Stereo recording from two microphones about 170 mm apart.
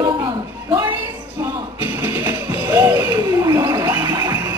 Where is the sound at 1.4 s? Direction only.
15° right (ahead or behind).